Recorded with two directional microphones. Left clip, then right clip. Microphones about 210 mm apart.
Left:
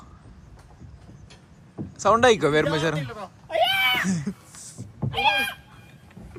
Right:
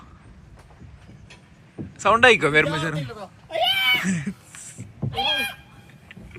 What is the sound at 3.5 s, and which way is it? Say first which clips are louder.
Cat: right 1 dB; 5° left (ahead or behind).